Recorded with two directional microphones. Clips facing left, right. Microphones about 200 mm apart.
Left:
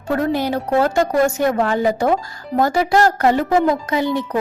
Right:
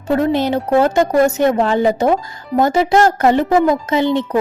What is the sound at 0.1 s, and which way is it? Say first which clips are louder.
A woman's voice: right 4 dB; 25° right (ahead or behind).